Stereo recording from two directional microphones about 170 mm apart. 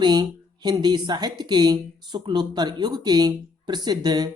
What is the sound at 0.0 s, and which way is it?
Speech, 25° right (ahead or behind).